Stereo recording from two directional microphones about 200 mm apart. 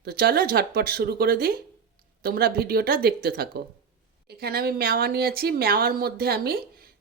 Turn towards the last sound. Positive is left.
turn(degrees=-50)  # may be behind; listen again after turning